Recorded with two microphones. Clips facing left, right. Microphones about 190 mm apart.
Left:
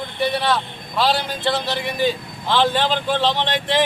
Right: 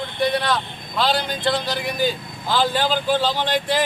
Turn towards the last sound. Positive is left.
turn(degrees=0)  # may be behind; listen again after turning